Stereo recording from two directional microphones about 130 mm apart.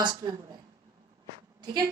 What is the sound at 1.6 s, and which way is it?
Speech, 30° right (ahead or behind).